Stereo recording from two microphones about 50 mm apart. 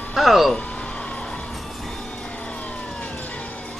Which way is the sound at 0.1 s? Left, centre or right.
Centre.